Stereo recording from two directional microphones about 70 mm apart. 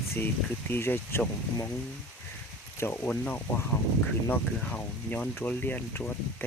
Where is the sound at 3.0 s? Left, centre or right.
Centre.